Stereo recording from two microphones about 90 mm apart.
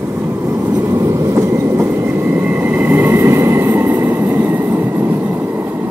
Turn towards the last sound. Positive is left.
turn(degrees=-25)  # may be behind; listen again after turning